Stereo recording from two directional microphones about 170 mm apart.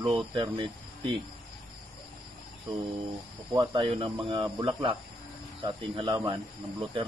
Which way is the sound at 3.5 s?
25° right (ahead or behind).